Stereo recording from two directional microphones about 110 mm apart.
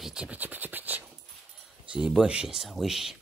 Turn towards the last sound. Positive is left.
turn(degrees=-5)  # may be behind; listen again after turning